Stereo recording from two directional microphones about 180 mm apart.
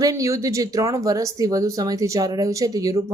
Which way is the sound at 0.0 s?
20° right (ahead or behind).